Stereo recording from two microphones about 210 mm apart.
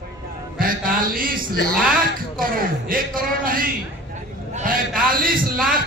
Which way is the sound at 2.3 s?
40° right (ahead or behind).